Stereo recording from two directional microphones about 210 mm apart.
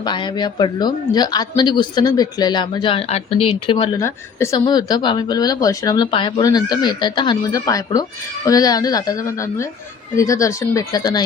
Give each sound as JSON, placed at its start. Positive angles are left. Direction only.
{"t": 0.0, "sound": "a woman's voice", "side_deg": 20}